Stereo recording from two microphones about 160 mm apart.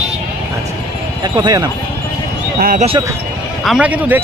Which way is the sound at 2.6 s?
60° right (ahead or behind).